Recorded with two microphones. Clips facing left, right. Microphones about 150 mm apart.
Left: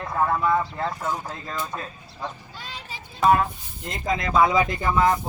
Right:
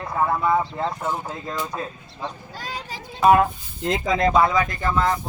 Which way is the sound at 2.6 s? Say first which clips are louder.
Right 5 dB; 40° right (ahead or behind).